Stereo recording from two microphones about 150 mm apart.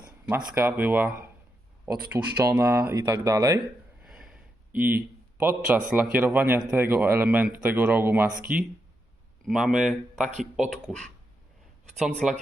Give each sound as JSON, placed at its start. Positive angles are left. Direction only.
{"t": 0.3, "sound": "speech", "side_deg": -15}
{"t": 4.0, "sound": "speech", "side_deg": -5}
{"t": 9.4, "sound": "speech", "side_deg": 0}